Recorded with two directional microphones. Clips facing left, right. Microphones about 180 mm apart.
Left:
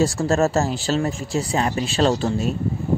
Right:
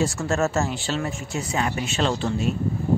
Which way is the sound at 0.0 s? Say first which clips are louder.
Left 4 dB; 35° left (ahead or behind).